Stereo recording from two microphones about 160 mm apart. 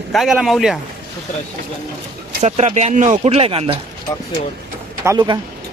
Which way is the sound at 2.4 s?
45° right (ahead or behind).